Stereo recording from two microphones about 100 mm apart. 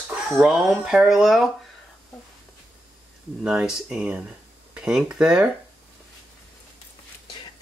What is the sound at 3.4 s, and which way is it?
Speech, 5° right (ahead or behind).